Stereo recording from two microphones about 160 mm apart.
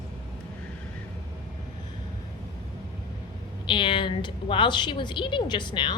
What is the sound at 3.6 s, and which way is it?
A woman's voice, 30° left (ahead or behind).